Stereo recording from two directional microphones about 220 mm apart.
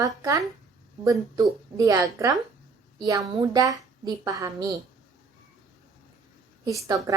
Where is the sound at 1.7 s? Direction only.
15° right (ahead or behind).